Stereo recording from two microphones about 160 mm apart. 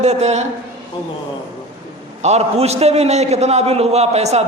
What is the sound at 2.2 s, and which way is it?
A man's voice, 45° right (ahead or behind).